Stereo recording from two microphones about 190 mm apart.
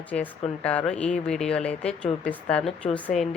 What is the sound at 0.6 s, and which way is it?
Speech, 5° left (ahead or behind).